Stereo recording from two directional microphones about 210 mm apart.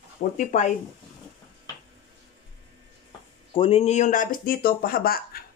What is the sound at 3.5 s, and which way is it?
Speech, 25° left (ahead or behind).